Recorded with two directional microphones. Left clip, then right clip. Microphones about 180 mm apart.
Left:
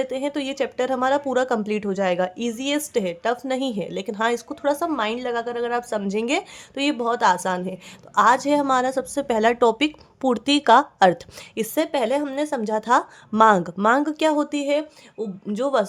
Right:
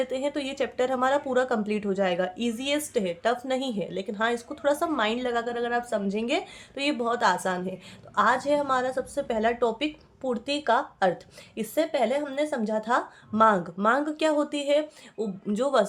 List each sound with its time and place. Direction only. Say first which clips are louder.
0.0 s speech: left 3 dB; 30° left (ahead or behind)